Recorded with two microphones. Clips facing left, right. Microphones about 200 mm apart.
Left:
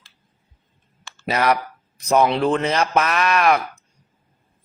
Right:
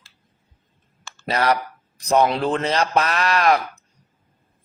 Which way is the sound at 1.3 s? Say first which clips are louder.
Left 1 dB; 30° right (ahead or behind).